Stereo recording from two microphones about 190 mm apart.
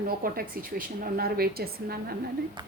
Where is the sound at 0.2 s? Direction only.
50° right (ahead or behind).